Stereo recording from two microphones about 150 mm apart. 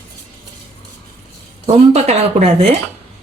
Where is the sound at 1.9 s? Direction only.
45° right (ahead or behind).